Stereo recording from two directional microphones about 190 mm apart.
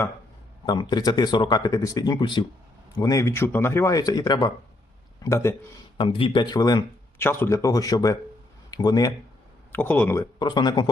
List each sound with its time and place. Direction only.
0.6 s speech: 25° left (ahead or behind)
6.0 s speech: 30° left (ahead or behind)
9.7 s speech: 10° left (ahead or behind)